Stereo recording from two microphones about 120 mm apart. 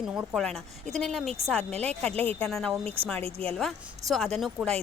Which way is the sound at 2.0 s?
15° left (ahead or behind).